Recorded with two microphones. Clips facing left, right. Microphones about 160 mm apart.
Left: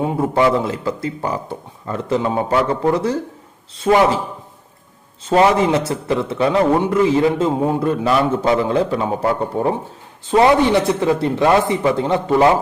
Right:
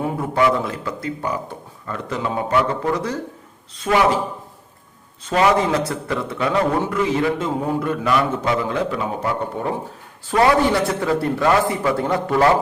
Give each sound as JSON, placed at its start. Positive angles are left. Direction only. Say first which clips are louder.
{"t": 0.0, "sound": "speech", "louder": "left 3 dB", "side_deg": 30}
{"t": 5.2, "sound": "speech", "louder": "left 3 dB", "side_deg": 30}